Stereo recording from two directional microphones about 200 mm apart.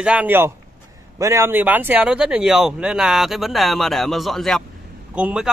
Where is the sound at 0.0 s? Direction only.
5° right (ahead or behind).